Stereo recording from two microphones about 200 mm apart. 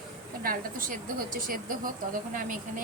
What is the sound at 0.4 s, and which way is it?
A woman's voice, 45° right (ahead or behind).